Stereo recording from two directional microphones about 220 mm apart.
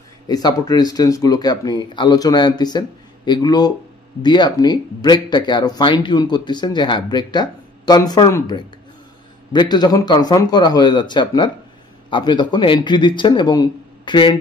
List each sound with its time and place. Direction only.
0.3 s speech: 15° left (ahead or behind)